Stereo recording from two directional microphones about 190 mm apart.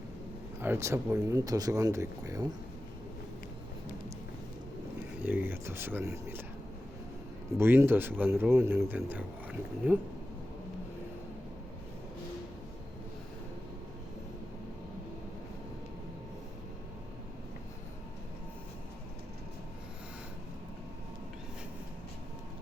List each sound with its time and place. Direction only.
0.6 s speech: 15° right (ahead or behind)
5.2 s speech: 10° right (ahead or behind)
7.6 s speech: 10° right (ahead or behind)